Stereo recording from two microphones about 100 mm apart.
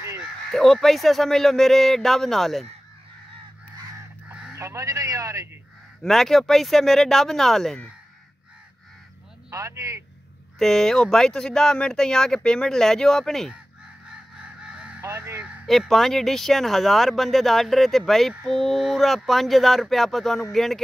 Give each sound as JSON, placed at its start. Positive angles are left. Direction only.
{"t": 0.5, "sound": "speech", "side_deg": 5}
{"t": 4.6, "sound": "a man's voice", "side_deg": -30}
{"t": 6.0, "sound": "speech", "side_deg": 5}
{"t": 9.5, "sound": "speech", "side_deg": -30}
{"t": 10.6, "sound": "speech", "side_deg": 5}
{"t": 14.6, "sound": "honk", "side_deg": -10}
{"t": 15.0, "sound": "crow", "side_deg": -30}
{"t": 15.6, "sound": "speech", "side_deg": 0}